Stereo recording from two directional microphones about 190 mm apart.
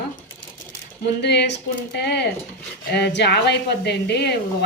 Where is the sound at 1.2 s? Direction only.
60° left (ahead or behind).